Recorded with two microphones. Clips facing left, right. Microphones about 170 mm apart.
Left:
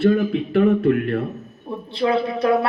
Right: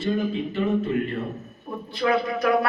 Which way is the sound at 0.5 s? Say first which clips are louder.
Left 10 dB; 65° left (ahead or behind).